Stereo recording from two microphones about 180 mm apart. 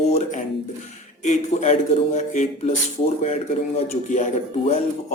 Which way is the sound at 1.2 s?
40° left (ahead or behind).